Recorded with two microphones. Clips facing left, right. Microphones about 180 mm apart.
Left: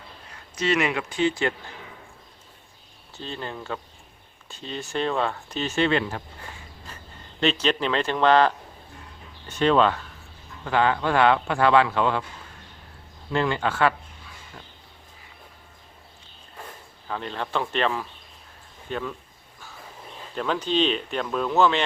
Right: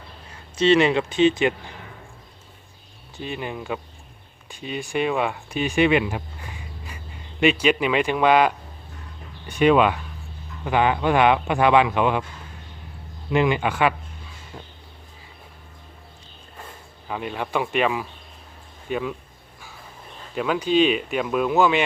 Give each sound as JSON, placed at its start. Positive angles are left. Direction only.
{"t": 0.5, "sound": "speech", "side_deg": -30}
{"t": 3.2, "sound": "speech", "side_deg": -15}
{"t": 13.3, "sound": "speech", "side_deg": -15}
{"t": 17.1, "sound": "speech", "side_deg": -10}
{"t": 20.3, "sound": "speech", "side_deg": -10}